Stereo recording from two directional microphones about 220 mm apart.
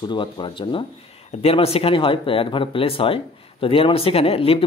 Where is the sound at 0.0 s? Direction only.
20° left (ahead or behind).